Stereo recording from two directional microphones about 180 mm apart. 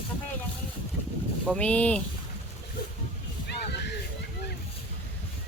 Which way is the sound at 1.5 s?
5° left (ahead or behind).